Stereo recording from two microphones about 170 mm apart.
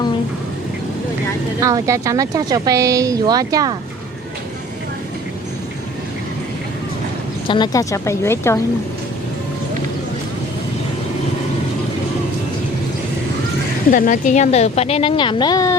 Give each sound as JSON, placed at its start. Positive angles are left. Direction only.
{"t": 1.6, "sound": "speech", "side_deg": -20}
{"t": 7.4, "sound": "a woman's voice", "side_deg": 25}
{"t": 13.9, "sound": "a woman's voice", "side_deg": 50}